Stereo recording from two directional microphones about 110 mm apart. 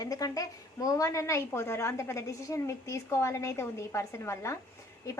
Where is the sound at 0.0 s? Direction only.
35° left (ahead or behind).